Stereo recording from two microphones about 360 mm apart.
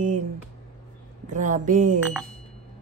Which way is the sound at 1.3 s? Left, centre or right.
Right.